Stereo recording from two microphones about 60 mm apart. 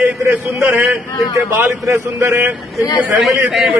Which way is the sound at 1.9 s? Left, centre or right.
Right.